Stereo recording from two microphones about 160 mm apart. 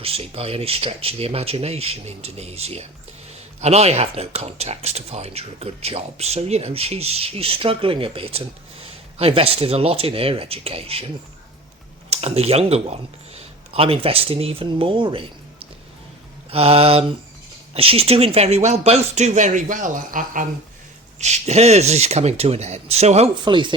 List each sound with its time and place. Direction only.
0.0 s speech: 40° right (ahead or behind)
12.1 s speech: 40° right (ahead or behind)
16.5 s speech: 40° right (ahead or behind); by 20.5 s 55° right (ahead or behind)
21.2 s speech: 45° right (ahead or behind)